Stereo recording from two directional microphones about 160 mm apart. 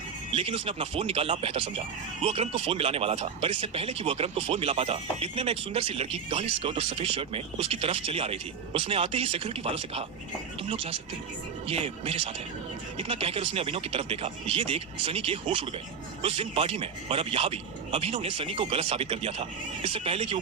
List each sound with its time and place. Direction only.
0.3 s speech: 40° right (ahead or behind)